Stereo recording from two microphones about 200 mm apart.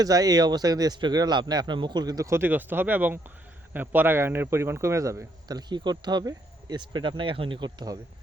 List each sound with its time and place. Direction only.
0.0 s speech: 20° right (ahead or behind)